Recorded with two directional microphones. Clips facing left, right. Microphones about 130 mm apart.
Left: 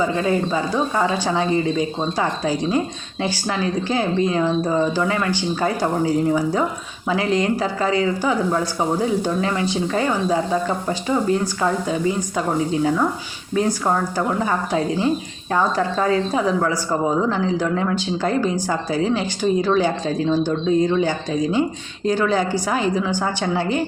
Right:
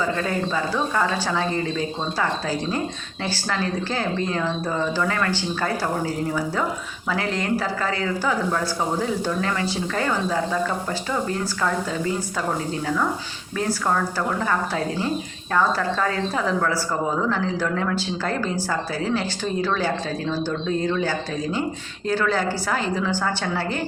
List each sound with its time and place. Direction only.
0.1 s speech: 20° left (ahead or behind)
13.6 s speech: 20° left (ahead or behind)